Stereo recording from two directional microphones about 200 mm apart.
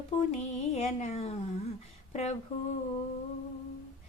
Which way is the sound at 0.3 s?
35° left (ahead or behind).